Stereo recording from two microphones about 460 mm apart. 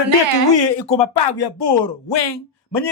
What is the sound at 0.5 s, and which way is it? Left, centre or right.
Speech, left.